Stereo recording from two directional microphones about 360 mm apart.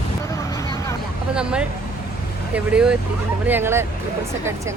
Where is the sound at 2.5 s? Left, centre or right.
Centre.